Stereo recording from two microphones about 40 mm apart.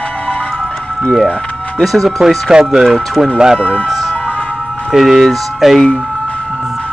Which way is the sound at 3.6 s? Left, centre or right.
Left.